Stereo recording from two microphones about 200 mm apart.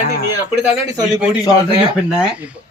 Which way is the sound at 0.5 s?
5° right (ahead or behind).